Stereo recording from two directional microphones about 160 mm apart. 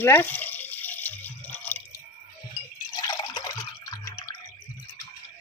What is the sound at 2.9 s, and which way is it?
Drip, 25° left (ahead or behind).